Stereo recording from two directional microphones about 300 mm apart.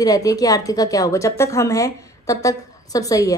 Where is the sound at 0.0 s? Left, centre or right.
Centre.